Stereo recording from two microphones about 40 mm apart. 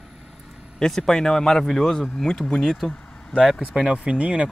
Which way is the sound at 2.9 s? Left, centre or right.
Centre.